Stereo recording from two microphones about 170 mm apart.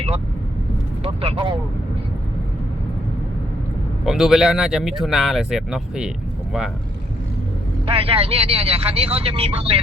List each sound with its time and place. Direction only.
1.0 s speech: 35° right (ahead or behind)
4.0 s speech: 5° right (ahead or behind)
7.9 s speech: 35° right (ahead or behind)